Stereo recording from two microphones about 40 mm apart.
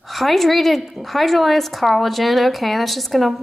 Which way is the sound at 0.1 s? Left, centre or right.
Centre.